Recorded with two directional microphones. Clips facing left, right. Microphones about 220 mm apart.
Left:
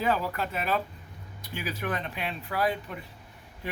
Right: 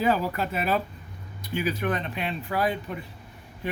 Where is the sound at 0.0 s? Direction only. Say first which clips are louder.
Right 3 dB; 5° right (ahead or behind).